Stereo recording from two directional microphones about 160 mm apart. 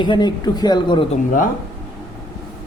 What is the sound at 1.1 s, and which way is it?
Speech, 55° left (ahead or behind).